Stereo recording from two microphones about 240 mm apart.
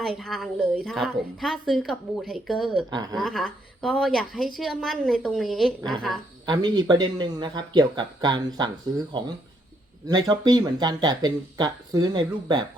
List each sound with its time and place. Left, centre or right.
0.0 s a woman's voice: centre
2.9 s speech: centre
3.2 s a woman's voice: centre
6.4 s speech: centre